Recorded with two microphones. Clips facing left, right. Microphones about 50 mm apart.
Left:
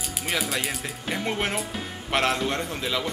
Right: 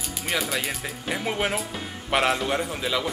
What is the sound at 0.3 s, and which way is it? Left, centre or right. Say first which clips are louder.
Speech: right 1 dB; centre.